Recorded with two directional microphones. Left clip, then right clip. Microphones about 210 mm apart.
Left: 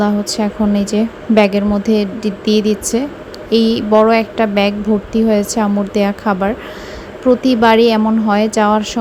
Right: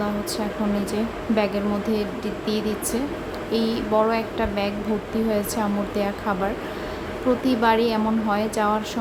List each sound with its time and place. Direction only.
0.0 s a woman's voice: 30° left (ahead or behind)